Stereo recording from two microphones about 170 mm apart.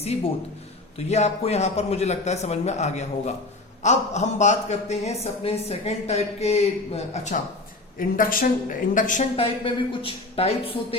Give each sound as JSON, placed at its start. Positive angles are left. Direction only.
{"t": 0.0, "sound": "a man's voice", "side_deg": 40}
{"t": 7.9, "sound": "speech", "side_deg": 55}
{"t": 9.3, "sound": "a man's voice", "side_deg": 30}